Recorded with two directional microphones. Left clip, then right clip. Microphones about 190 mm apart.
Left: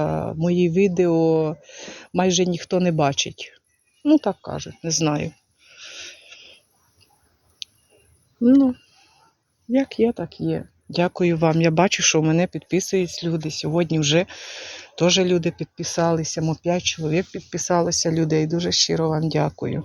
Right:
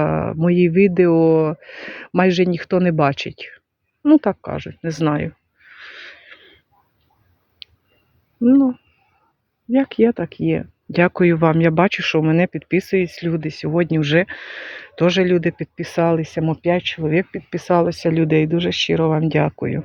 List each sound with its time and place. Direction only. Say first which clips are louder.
0.0 s speech: right 4 dB; 25° right (ahead or behind)
4.8 s a sound: right 2 dB; 20° right (ahead or behind)
8.4 s speech: right 2 dB; 5° right (ahead or behind)
9.7 s speech: right 4 dB; 20° right (ahead or behind)